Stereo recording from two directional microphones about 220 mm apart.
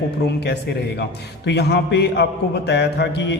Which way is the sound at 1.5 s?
50° left (ahead or behind).